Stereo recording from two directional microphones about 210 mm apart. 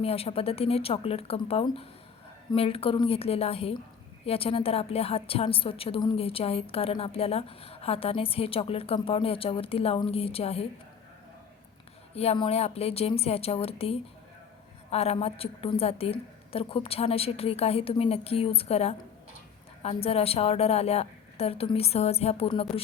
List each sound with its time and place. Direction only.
0.0 s a woman's voice: 30° left (ahead or behind)
12.1 s a woman's voice: 30° left (ahead or behind)